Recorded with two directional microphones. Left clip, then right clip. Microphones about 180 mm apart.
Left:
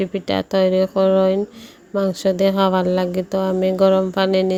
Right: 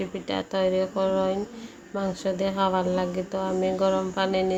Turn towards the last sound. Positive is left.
turn(degrees=45)  # may be behind; listen again after turning